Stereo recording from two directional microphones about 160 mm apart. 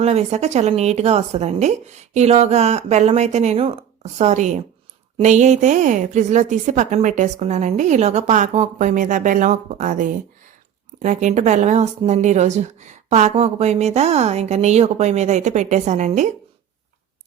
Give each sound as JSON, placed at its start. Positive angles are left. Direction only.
{"t": 0.0, "sound": "speech", "side_deg": -40}